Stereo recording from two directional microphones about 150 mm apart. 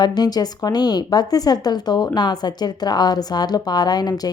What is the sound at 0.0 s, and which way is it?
A woman's voice, 25° left (ahead or behind).